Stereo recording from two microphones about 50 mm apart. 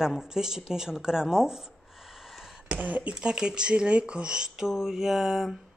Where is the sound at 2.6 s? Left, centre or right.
Right.